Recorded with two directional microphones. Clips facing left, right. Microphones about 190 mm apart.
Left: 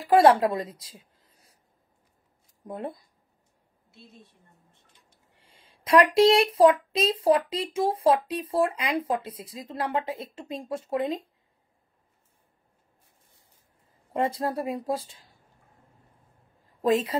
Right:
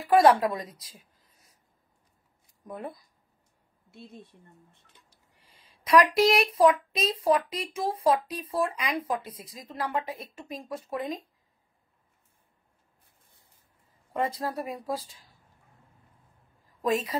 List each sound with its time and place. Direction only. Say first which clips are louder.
0.1 s a woman's voice: left 2 dB; 30° left (ahead or behind)
2.6 s speech: left 3 dB; 25° left (ahead or behind)
5.3 s a sound: left 3 dB; 25° left (ahead or behind)
6.1 s speech: left 4 dB; 30° left (ahead or behind)
14.1 s speech: left 3 dB; 30° left (ahead or behind)
16.8 s speech: left 4 dB; 25° left (ahead or behind)